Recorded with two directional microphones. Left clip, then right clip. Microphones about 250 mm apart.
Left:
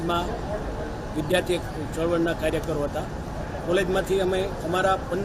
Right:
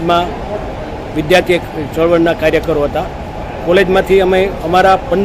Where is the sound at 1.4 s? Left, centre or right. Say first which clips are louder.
Right 13 dB; left.